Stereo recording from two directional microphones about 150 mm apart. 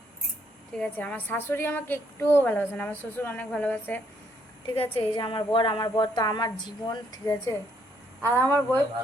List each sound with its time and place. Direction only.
0.8 s a woman's voice: 10° left (ahead or behind)
4.7 s a woman's voice: 35° left (ahead or behind)
8.4 s a woman's voice: 15° left (ahead or behind)